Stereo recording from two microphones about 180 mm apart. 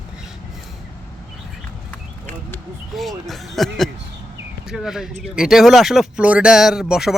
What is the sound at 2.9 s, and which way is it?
Speech, centre (ahead or behind).